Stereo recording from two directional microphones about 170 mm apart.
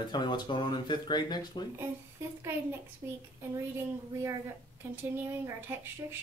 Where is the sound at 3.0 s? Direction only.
10° right (ahead or behind).